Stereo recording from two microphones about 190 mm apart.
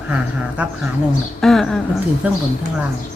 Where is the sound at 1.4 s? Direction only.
Centre (ahead or behind).